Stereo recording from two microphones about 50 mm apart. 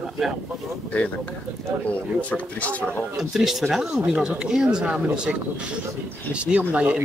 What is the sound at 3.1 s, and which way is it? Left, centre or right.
Speech, centre.